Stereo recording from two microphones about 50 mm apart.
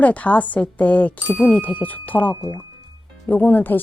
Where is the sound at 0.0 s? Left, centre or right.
Left.